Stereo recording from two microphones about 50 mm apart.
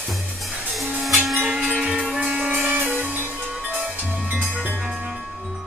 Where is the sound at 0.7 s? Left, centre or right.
Centre.